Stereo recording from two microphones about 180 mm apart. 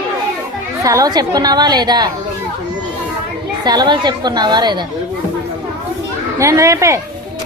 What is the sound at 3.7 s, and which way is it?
A woman's voice, 25° right (ahead or behind).